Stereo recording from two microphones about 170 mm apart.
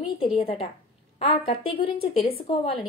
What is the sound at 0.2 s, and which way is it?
Speech, 35° left (ahead or behind).